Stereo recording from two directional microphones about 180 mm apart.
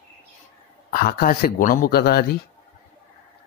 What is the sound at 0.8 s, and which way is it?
Speech, 55° left (ahead or behind).